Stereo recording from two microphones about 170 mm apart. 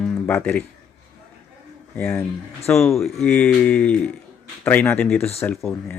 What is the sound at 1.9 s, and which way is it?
Speech, 10° left (ahead or behind).